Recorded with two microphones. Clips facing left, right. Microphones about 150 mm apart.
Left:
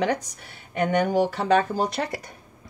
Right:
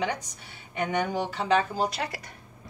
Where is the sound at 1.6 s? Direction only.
50° left (ahead or behind).